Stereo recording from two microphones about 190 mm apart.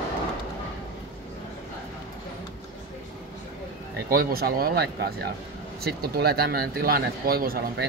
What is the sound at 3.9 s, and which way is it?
Speech, 50° right (ahead or behind).